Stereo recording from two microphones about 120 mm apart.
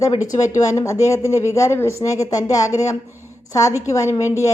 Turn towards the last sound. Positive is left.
turn(degrees=25)  # may be behind; listen again after turning